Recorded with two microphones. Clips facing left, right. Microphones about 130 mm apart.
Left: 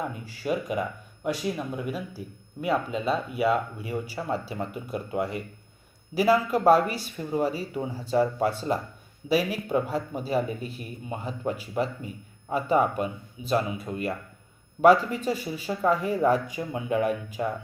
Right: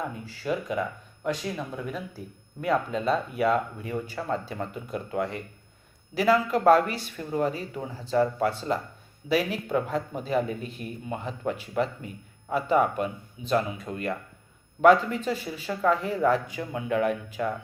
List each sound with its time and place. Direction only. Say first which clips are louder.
0.0 s speech: left 1 dB; 15° left (ahead or behind)
12.5 s speech: even; 15° left (ahead or behind)